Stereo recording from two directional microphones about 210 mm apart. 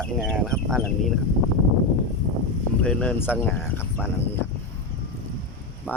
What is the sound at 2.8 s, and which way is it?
Speech, 5° left (ahead or behind).